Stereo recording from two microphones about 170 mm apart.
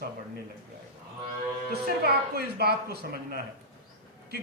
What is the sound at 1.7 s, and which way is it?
A man's voice, 70° right (ahead or behind).